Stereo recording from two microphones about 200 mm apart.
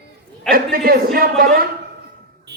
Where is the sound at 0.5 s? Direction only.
50° right (ahead or behind).